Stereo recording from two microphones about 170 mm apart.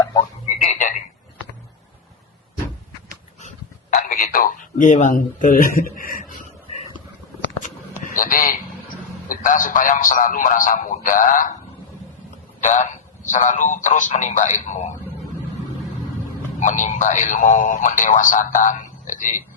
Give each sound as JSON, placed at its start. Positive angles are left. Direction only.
{"t": 0.6, "sound": "frog", "side_deg": 45}
{"t": 3.9, "sound": "speech", "side_deg": 50}
{"t": 8.1, "sound": "a sound", "side_deg": 55}
{"t": 9.3, "sound": "a man's voice", "side_deg": 50}
{"t": 12.6, "sound": "a man's voice", "side_deg": 45}
{"t": 16.6, "sound": "a man's voice", "side_deg": 45}